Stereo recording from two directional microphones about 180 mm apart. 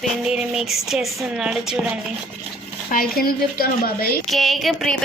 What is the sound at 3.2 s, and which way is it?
A woman's voice, 55° left (ahead or behind).